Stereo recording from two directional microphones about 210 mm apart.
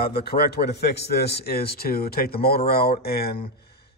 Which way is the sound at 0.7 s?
50° left (ahead or behind).